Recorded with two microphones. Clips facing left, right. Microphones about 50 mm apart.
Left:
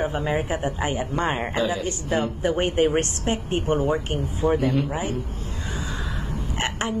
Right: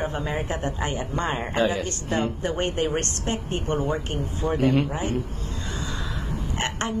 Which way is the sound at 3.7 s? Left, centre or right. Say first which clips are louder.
Left 3 dB; centre.